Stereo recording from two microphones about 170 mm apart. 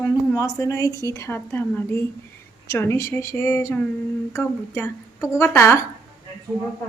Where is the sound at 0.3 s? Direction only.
20° left (ahead or behind).